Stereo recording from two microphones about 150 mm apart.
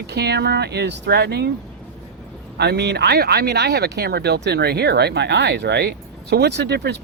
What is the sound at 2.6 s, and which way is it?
Speech, 90° right.